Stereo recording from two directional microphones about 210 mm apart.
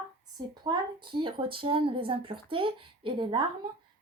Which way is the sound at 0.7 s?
20° right (ahead or behind).